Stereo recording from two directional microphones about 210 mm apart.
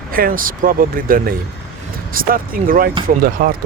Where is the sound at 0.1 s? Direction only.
45° right (ahead or behind).